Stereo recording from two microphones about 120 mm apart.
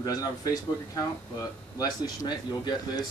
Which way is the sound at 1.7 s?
30° left (ahead or behind).